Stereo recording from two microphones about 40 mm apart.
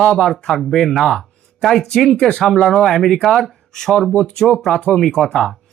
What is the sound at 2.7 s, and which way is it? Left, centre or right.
Speech, centre.